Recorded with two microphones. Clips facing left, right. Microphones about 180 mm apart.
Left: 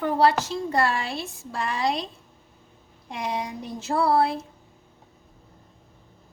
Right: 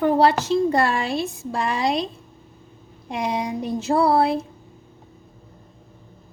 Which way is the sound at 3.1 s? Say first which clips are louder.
Right 5 dB; 15° right (ahead or behind).